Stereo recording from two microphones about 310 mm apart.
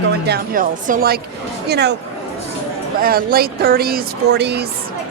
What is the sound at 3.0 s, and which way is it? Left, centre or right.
Speech, right.